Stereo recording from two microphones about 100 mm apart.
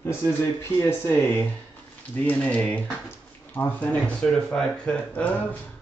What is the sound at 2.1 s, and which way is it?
Speech, 15° left (ahead or behind).